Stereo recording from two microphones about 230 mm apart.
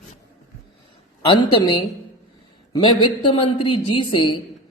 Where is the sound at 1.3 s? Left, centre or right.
Centre.